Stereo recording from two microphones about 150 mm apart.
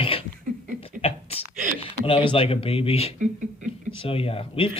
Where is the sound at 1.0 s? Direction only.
40° left (ahead or behind).